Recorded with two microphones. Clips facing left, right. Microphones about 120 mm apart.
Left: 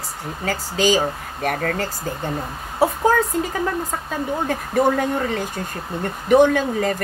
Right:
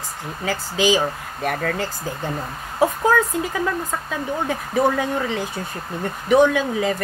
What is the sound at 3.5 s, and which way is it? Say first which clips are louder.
Speech: right 1 dB; 40° left (ahead or behind).